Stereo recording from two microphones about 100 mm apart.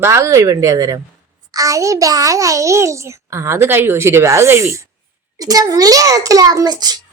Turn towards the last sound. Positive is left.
turn(degrees=-45)  # may be behind; listen again after turning